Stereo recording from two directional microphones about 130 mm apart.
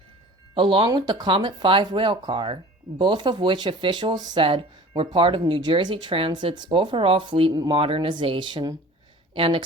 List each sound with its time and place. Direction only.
0.5 s speech: 40° right (ahead or behind)